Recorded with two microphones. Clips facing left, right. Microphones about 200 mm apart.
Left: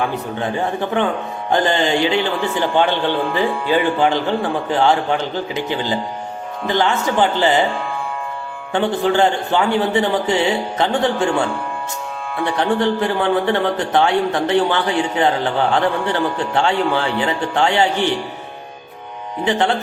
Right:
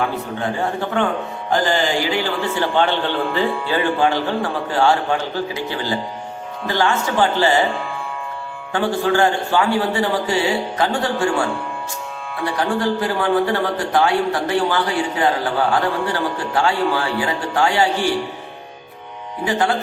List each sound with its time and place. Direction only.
0.3 s a man's voice: 20° left (ahead or behind)
8.7 s a man's voice: 20° left (ahead or behind)
12.5 s a man's voice: 25° left (ahead or behind)
19.5 s a man's voice: 25° left (ahead or behind)